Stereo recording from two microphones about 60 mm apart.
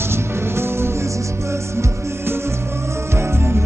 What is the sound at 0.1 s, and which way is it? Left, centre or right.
Music, right.